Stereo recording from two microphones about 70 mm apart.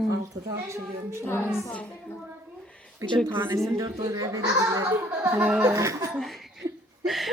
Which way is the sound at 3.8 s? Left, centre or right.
Right.